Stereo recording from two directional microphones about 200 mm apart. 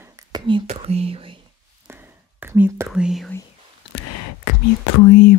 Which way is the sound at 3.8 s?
75° left (ahead or behind).